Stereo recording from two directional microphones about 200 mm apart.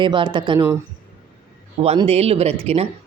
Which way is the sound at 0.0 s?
25° right (ahead or behind).